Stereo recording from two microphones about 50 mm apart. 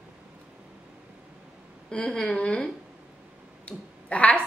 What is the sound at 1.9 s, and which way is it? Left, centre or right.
A woman's voice, centre.